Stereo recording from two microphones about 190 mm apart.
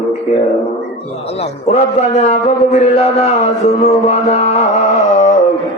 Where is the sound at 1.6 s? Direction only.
35° left (ahead or behind).